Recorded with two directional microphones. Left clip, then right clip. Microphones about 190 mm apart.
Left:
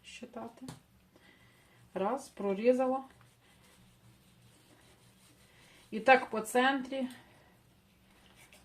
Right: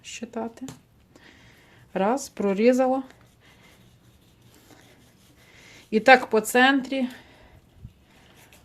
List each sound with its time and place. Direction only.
0.0 s speech: 60° right (ahead or behind)
1.9 s speech: 60° right (ahead or behind)
5.9 s speech: 50° right (ahead or behind)